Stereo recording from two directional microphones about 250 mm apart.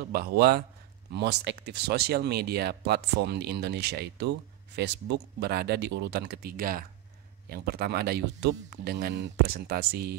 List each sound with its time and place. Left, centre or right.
0.1 s speech: right